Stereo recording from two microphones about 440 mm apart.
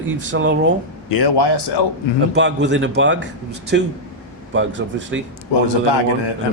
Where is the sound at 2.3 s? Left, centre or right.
Right.